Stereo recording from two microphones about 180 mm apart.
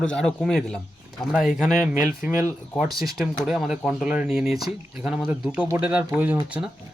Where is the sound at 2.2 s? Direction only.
15° right (ahead or behind).